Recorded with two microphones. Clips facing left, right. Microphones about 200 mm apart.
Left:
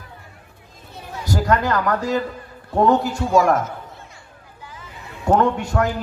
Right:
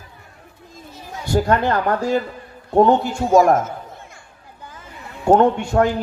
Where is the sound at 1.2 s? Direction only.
25° right (ahead or behind).